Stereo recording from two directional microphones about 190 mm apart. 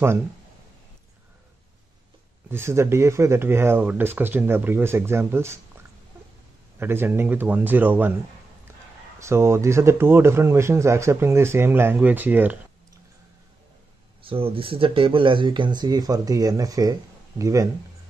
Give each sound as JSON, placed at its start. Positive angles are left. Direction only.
{"t": 2.5, "sound": "a man's voice", "side_deg": -15}
{"t": 6.8, "sound": "a man's voice", "side_deg": -10}
{"t": 9.2, "sound": "a man's voice", "side_deg": -15}
{"t": 14.2, "sound": "a man's voice", "side_deg": -30}